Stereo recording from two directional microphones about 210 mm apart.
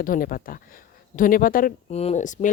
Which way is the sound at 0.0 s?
40° left (ahead or behind).